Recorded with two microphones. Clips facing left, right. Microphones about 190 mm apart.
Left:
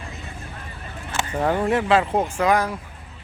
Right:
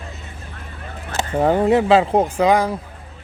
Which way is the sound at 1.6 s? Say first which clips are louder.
Right 5 dB; 25° right (ahead or behind).